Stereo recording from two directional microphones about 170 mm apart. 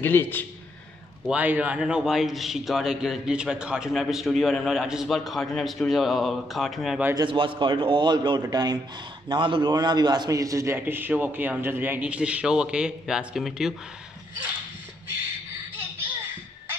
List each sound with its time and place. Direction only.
0.0 s a man's voice: 10° left (ahead or behind)
1.2 s a man's voice: 10° right (ahead or behind)
7.2 s a man's voice: 30° right (ahead or behind); by 13.7 s centre (ahead or behind)